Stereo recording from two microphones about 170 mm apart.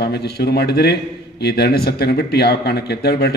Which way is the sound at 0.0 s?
70° left (ahead or behind).